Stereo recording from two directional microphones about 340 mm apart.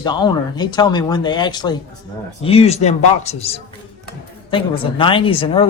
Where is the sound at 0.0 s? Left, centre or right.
Centre.